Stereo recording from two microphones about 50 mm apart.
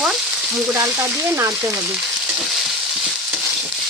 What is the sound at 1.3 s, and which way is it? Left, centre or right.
Speech, right.